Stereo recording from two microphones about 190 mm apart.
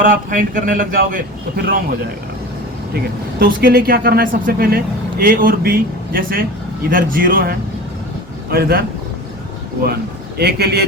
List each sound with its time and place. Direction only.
0.0 s speech: 45° right (ahead or behind)
10.3 s a man's voice: 55° right (ahead or behind)